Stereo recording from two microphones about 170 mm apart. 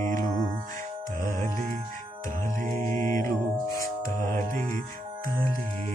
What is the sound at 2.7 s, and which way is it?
Music, 15° left (ahead or behind).